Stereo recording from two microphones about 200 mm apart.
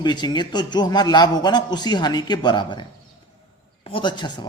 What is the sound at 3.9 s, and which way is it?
Speech, 25° left (ahead or behind).